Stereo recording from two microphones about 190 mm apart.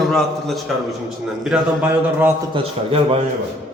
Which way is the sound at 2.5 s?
30° right (ahead or behind).